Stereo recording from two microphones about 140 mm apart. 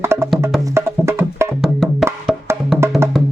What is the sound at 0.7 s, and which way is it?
Music, 20° right (ahead or behind).